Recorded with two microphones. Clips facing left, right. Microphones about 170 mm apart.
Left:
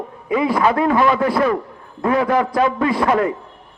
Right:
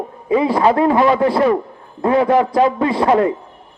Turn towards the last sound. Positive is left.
turn(degrees=-25)  # may be behind; listen again after turning